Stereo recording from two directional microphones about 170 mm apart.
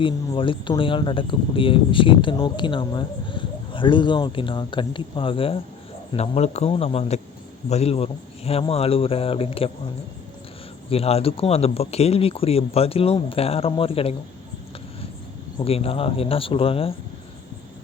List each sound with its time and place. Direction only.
0.0 s speech: 30° left (ahead or behind)
10.8 s speech: 35° left (ahead or behind)
15.5 s speech: 35° left (ahead or behind)